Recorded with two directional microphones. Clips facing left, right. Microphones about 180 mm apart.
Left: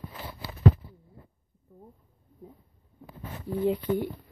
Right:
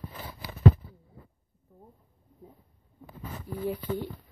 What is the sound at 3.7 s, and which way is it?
Speech, 15° left (ahead or behind).